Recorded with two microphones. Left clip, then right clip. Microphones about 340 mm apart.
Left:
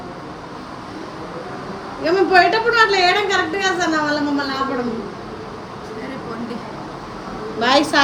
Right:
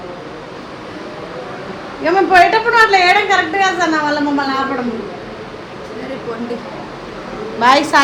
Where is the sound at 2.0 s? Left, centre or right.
Centre.